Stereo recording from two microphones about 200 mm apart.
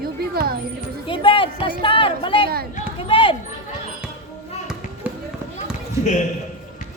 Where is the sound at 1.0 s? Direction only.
25° left (ahead or behind).